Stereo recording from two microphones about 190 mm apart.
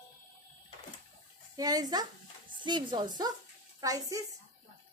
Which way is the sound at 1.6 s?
20° right (ahead or behind).